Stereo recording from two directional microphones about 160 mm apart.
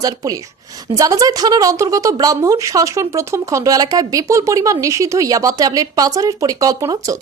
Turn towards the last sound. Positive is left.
turn(degrees=-20)  # may be behind; listen again after turning